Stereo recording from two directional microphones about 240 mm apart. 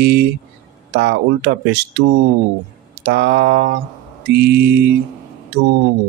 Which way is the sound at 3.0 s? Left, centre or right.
Right.